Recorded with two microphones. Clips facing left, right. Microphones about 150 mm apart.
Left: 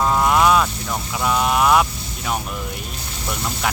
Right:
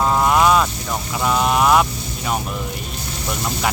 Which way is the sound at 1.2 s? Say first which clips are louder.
Right 1 dB; centre (ahead or behind).